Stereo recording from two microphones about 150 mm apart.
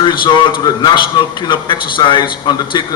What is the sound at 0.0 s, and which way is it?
A man's voice, 30° left (ahead or behind).